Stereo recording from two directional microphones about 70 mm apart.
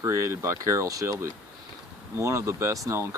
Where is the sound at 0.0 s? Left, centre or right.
Right.